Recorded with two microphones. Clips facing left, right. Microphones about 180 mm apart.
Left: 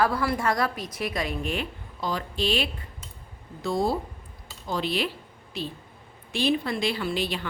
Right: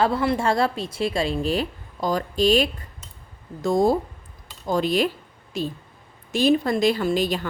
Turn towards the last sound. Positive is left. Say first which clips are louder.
# right 6 dB
turn(degrees=-45)  # may be behind; listen again after turning